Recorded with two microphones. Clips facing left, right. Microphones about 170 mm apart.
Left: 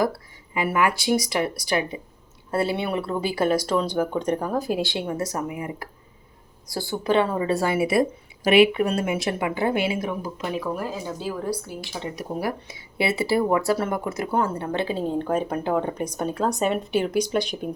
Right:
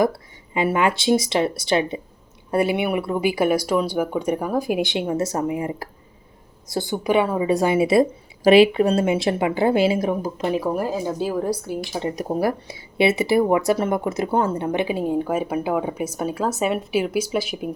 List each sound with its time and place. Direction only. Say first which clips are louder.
0.0 s speech: right 4 dB; 20° right (ahead or behind)
2.5 s speech: right 4 dB; 15° right (ahead or behind); by 12.7 s 40° right (ahead or behind)
13.0 s speech: right 4 dB; 20° right (ahead or behind); by 17.7 s 5° right (ahead or behind)